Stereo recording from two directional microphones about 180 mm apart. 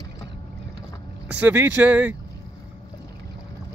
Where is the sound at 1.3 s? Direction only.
10° right (ahead or behind).